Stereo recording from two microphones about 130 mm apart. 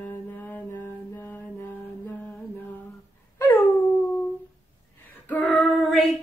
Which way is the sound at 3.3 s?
15° left (ahead or behind).